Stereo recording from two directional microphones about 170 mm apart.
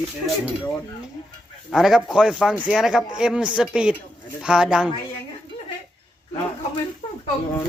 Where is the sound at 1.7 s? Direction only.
Centre (ahead or behind).